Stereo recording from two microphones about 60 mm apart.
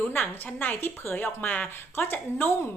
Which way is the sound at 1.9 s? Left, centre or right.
Left.